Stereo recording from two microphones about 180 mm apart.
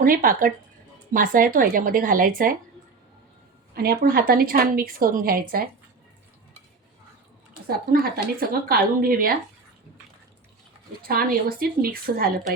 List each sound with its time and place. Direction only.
0.0 s speech: 50° right (ahead or behind)
3.8 s speech: 55° right (ahead or behind)
8.0 s speech: 55° right (ahead or behind)
11.0 s speech: 55° right (ahead or behind)